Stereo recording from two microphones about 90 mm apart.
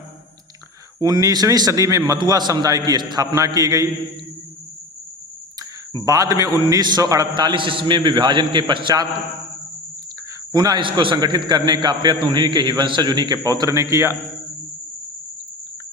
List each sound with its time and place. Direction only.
0.9 s a man's voice: 40° right (ahead or behind)
3.3 s a man's voice: 40° right (ahead or behind)
6.0 s a man's voice: 40° right (ahead or behind); by 9.0 s 60° right (ahead or behind)
10.5 s a man's voice: 50° right (ahead or behind)
10.8 s a man's voice: 65° right (ahead or behind); by 14.2 s 35° right (ahead or behind)